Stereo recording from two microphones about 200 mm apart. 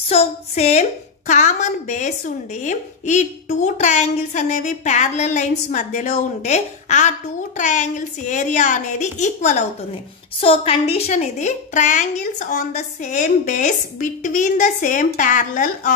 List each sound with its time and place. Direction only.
0.1 s a woman's voice: 30° left (ahead or behind)